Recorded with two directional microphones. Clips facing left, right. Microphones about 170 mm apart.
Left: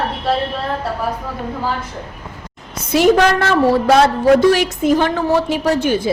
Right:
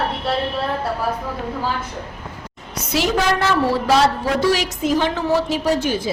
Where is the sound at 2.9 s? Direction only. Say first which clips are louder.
Left 7 dB; 55° left (ahead or behind).